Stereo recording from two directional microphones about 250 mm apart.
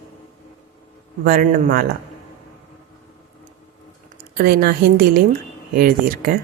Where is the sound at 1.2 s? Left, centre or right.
Right.